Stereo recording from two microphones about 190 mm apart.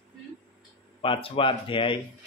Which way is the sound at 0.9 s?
30° left (ahead or behind).